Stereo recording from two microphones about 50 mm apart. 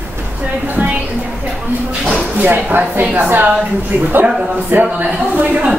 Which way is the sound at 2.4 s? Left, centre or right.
Right.